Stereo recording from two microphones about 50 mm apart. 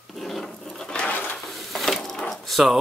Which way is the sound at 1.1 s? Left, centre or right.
Left.